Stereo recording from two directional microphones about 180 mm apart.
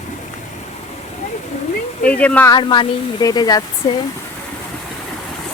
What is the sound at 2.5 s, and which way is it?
A woman's voice, 25° left (ahead or behind).